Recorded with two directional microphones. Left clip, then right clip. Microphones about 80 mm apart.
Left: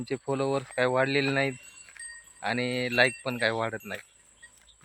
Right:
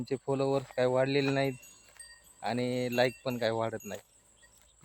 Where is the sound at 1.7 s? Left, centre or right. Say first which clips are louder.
Left 8 dB; right.